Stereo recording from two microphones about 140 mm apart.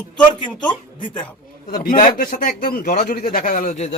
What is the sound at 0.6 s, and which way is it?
Speech, 35° left (ahead or behind).